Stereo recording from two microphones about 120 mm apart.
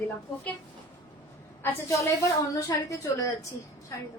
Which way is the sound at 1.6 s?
25° left (ahead or behind).